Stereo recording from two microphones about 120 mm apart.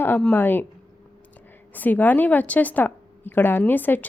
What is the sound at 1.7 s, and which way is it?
A woman's voice, 15° left (ahead or behind).